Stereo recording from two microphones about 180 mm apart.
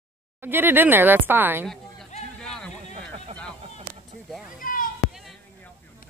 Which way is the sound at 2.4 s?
5° left (ahead or behind).